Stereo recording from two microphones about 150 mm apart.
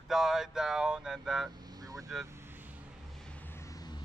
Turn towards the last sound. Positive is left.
turn(degrees=25)  # may be behind; listen again after turning